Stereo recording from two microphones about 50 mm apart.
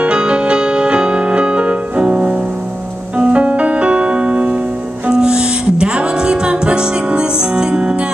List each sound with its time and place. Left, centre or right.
0.0 s music: right